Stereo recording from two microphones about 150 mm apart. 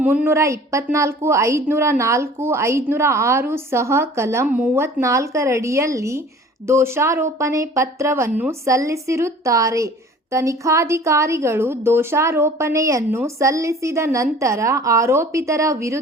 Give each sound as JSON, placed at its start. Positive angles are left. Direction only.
{"t": 0.0, "sound": "a woman's voice", "side_deg": -10}